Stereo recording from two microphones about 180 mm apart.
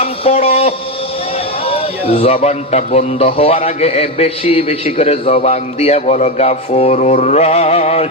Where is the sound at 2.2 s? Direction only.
35° left (ahead or behind).